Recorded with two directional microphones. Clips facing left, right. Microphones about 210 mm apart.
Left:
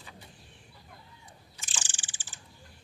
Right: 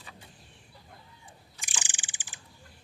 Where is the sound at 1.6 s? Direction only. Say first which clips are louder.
Right 1 dB; 15° right (ahead or behind).